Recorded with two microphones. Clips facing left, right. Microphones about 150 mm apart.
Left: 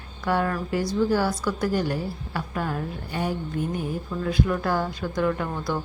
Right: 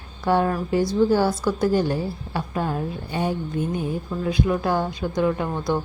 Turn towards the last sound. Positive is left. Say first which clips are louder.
# right 3 dB
turn(degrees=-20)  # may be behind; listen again after turning